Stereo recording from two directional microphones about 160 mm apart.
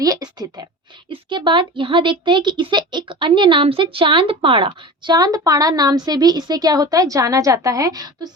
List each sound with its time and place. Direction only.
0.0 s speech: 25° right (ahead or behind)